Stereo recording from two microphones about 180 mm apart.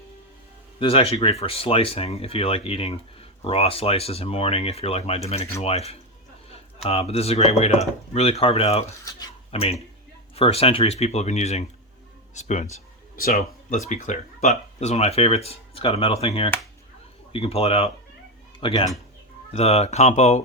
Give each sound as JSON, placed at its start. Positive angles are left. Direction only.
{"t": 0.8, "sound": "speech", "side_deg": 30}
{"t": 9.0, "sound": "a sound", "side_deg": 20}
{"t": 9.5, "sound": "speech", "side_deg": 35}
{"t": 13.1, "sound": "speech", "side_deg": 50}